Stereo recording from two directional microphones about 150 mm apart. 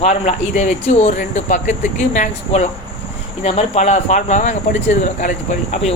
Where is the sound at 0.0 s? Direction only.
55° left (ahead or behind).